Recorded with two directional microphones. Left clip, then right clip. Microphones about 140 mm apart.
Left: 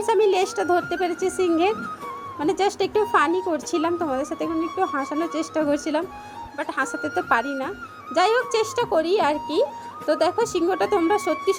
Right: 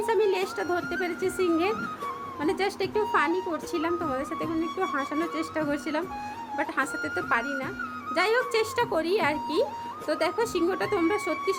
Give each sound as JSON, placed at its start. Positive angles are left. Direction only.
{"t": 0.0, "sound": "a woman's voice", "side_deg": 40}
{"t": 4.9, "sound": "a woman's voice", "side_deg": 20}